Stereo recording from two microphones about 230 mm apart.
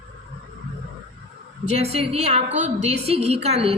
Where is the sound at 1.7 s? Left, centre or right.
Right.